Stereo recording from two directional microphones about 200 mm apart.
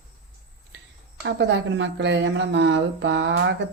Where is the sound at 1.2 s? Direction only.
60° right (ahead or behind).